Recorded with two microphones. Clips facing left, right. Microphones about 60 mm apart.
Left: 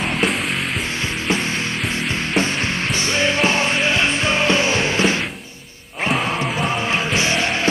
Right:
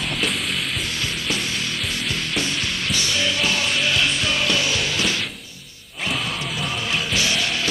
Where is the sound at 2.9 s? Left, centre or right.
Left.